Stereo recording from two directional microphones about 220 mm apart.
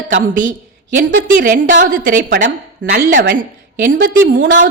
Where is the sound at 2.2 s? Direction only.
55° right (ahead or behind).